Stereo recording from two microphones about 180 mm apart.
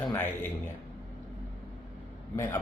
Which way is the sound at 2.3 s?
10° left (ahead or behind).